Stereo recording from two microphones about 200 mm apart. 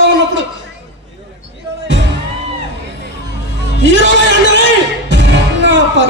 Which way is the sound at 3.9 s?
65° right (ahead or behind).